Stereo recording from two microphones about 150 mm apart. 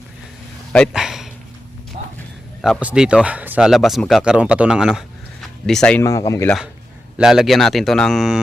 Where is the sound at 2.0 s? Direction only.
50° right (ahead or behind).